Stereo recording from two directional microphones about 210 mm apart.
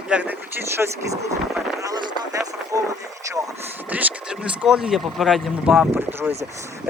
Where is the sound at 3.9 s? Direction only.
5° right (ahead or behind).